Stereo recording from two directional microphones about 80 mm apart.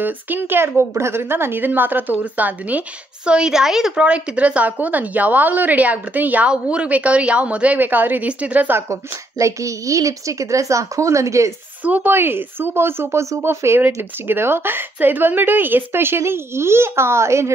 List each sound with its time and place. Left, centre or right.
0.0 s a woman's voice: right
3.3 s a woman's voice: centre
8.7 s a woman's voice: right
11.8 s a woman's voice: right